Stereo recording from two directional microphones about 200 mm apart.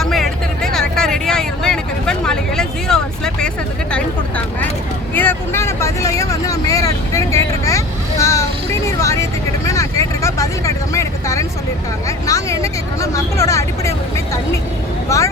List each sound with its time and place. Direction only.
0.0 s vehicle: centre (ahead or behind)
3.9 s a sound: 5° left (ahead or behind)
5.1 s vehicle: 10° left (ahead or behind)
9.6 s vehicle: 15° left (ahead or behind)
15.1 s vehicle: 15° left (ahead or behind)